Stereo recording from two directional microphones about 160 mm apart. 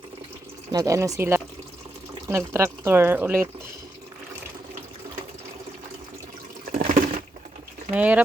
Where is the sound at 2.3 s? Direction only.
15° right (ahead or behind).